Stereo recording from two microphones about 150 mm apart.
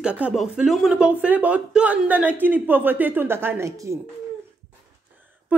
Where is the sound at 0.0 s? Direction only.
5° right (ahead or behind).